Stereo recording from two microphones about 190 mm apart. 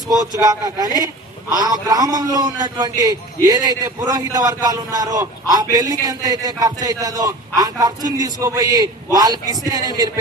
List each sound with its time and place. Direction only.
0.2 s a man's voice: 20° right (ahead or behind)